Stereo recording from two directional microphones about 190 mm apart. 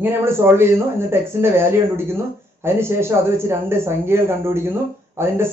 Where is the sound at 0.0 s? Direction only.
10° right (ahead or behind).